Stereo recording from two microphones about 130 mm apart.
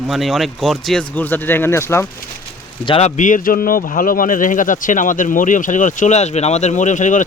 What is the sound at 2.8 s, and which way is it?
Speech, 50° left (ahead or behind).